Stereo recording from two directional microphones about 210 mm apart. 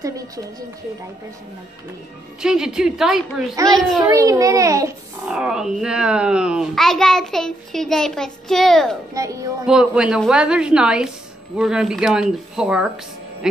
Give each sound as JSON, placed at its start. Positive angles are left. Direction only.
{"t": 0.0, "sound": "a child's voice", "side_deg": -15}
{"t": 2.4, "sound": "a woman's voice", "side_deg": -5}
{"t": 3.6, "sound": "a child's voice", "side_deg": -15}
{"t": 5.3, "sound": "a woman's voice", "side_deg": 0}
{"t": 9.1, "sound": "a child's voice", "side_deg": -15}
{"t": 9.7, "sound": "a woman's voice", "side_deg": -5}